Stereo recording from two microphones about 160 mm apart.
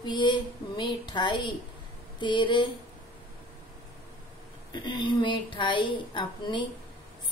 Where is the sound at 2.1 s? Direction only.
30° left (ahead or behind).